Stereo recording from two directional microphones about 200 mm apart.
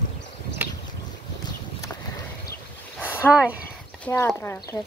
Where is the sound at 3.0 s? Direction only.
10° left (ahead or behind).